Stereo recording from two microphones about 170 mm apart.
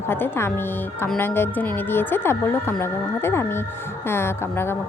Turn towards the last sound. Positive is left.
turn(degrees=15)  # may be behind; listen again after turning